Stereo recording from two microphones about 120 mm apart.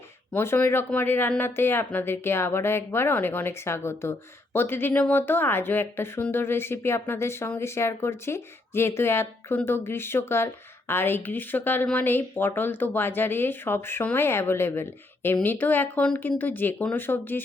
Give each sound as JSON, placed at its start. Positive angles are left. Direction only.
{"t": 0.3, "sound": "speech", "side_deg": 15}